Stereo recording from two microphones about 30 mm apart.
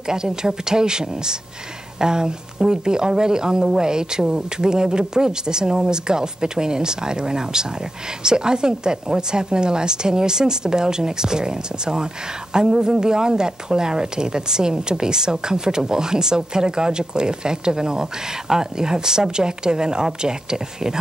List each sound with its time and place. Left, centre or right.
0.0 s speech: right